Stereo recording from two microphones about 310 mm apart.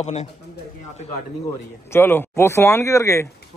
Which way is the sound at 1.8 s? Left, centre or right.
Centre.